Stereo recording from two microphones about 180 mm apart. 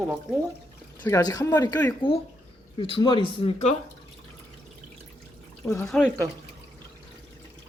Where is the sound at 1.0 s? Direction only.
20° left (ahead or behind).